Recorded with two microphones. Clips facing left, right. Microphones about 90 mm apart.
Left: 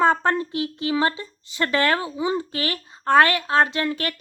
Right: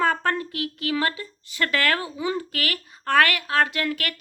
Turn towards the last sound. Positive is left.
turn(degrees=30)  # may be behind; listen again after turning